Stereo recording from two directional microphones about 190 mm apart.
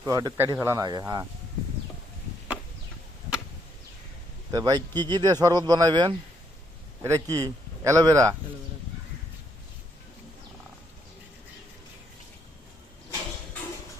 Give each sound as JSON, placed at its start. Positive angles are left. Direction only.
{"t": 0.0, "sound": "speech", "side_deg": -20}
{"t": 4.5, "sound": "speech", "side_deg": -20}